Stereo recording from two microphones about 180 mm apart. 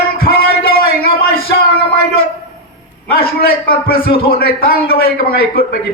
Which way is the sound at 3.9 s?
30° left (ahead or behind).